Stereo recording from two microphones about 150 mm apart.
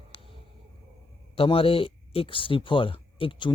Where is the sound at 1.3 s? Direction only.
40° left (ahead or behind).